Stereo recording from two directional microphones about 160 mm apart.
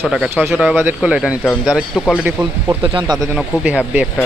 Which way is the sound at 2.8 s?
30° right (ahead or behind).